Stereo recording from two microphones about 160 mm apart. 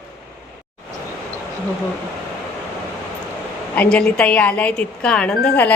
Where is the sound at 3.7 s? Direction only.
5° left (ahead or behind).